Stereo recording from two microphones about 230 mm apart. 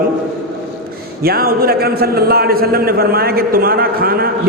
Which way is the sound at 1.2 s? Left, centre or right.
Right.